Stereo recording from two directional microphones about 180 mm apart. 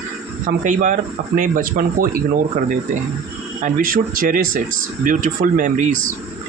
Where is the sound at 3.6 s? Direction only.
50° right (ahead or behind).